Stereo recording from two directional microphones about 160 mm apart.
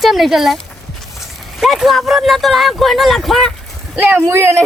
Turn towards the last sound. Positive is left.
turn(degrees=-15)  # may be behind; listen again after turning